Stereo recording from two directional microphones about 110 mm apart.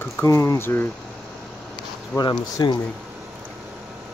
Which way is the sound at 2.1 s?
40° left (ahead or behind).